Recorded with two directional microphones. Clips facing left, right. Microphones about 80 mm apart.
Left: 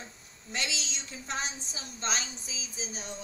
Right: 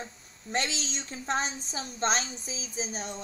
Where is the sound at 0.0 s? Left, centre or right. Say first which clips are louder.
Right 6 dB; right.